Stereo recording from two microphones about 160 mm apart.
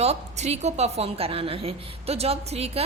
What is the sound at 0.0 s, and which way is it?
A woman's voice, 40° right (ahead or behind).